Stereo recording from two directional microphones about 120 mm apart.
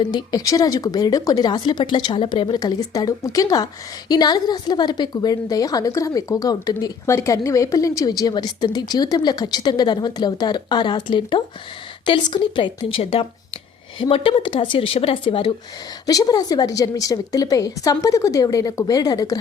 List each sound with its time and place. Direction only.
0.0 s a woman's voice: 35° left (ahead or behind)
16.0 s a woman's voice: 30° left (ahead or behind)